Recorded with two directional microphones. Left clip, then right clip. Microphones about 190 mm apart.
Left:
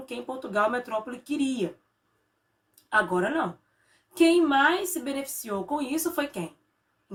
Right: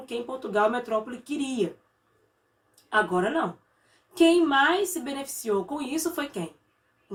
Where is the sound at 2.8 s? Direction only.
20° left (ahead or behind).